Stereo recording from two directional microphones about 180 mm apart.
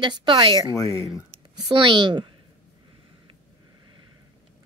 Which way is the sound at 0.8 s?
20° left (ahead or behind).